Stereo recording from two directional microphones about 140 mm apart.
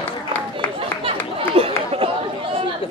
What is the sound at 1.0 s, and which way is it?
Chatter, 40° right (ahead or behind).